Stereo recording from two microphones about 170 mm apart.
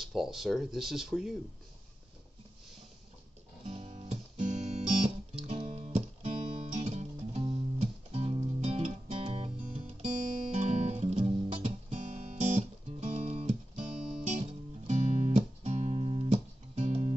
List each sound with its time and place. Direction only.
0.0 s speech: centre (ahead or behind)
3.6 s guitar: 35° right (ahead or behind)
5.5 s music: 35° right (ahead or behind)